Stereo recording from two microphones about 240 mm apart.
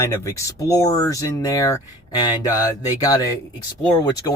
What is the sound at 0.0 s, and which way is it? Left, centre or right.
Speech, centre.